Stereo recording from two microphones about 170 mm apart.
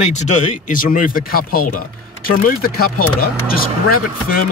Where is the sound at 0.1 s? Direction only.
45° left (ahead or behind); by 3.6 s 60° left (ahead or behind).